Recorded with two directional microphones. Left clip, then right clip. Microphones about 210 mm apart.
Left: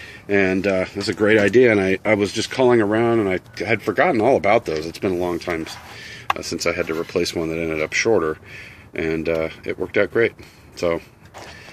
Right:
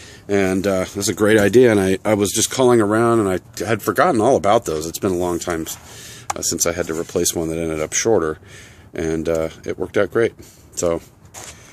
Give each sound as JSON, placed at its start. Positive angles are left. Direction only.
{"t": 0.3, "sound": "speech", "side_deg": -15}